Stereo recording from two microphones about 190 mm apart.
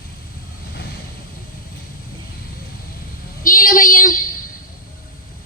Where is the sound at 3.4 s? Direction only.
45° left (ahead or behind).